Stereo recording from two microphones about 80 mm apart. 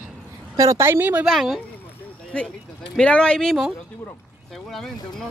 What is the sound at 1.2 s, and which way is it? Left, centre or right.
Speech, centre.